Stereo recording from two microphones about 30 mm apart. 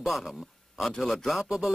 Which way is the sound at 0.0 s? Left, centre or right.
Centre.